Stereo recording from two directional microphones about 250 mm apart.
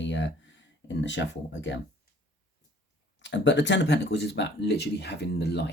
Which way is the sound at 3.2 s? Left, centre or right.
Left.